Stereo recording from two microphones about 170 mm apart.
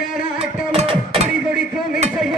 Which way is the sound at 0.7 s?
35° right (ahead or behind).